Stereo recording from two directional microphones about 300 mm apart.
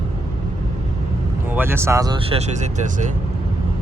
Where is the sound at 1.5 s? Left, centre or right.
Centre; by 3.1 s right.